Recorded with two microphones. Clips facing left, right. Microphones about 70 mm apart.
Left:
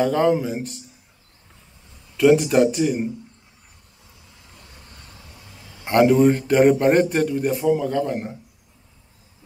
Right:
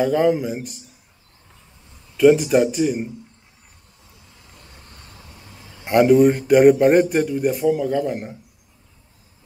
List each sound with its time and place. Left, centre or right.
0.0 s a man's voice: centre
2.1 s a man's voice: centre
4.6 s vehicle: right
5.9 s a man's voice: centre